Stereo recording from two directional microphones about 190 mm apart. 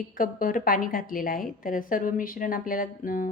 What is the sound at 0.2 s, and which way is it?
A woman's voice, 45° left (ahead or behind).